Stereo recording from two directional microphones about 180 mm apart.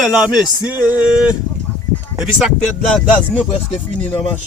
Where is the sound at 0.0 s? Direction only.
5° right (ahead or behind).